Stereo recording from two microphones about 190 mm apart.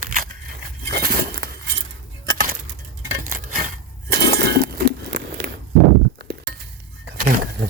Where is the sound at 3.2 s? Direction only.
45° right (ahead or behind).